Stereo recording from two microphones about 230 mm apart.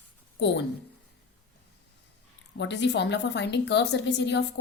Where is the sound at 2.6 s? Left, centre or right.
Left.